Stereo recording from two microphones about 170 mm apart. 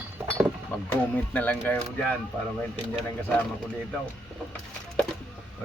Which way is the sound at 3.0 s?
5° left (ahead or behind).